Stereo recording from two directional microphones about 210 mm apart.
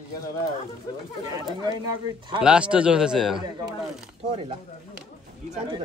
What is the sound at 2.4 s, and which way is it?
A man's voice, 5° right (ahead or behind).